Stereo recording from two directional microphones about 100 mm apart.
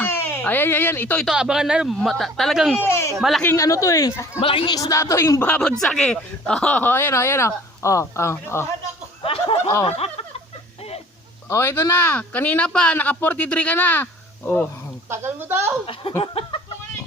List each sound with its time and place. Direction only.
0.0 s speech: 20° left (ahead or behind)
1.2 s speech: 5° right (ahead or behind)
2.8 s speech: 25° left (ahead or behind)
3.2 s speech: centre (ahead or behind)
3.5 s speech: 35° left (ahead or behind)
4.4 s speech: 65° left (ahead or behind)
4.7 s speech: 35° left (ahead or behind)
5.4 s speech: 15° left (ahead or behind)
9.2 s a sound: 65° left (ahead or behind)
9.8 s speech: 80° left
11.4 s speech: 25° left (ahead or behind)
15.1 s speech: 25° right (ahead or behind)
16.2 s a sound: 65° left (ahead or behind)